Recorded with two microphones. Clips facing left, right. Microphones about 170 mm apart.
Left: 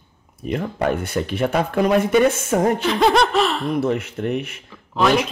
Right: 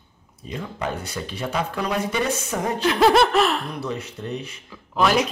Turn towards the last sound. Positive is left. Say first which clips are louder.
# left 3 dB
turn(degrees=0)  # may be behind; listen again after turning